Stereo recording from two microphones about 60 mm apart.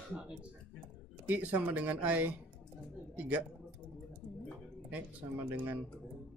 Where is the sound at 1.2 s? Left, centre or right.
Right.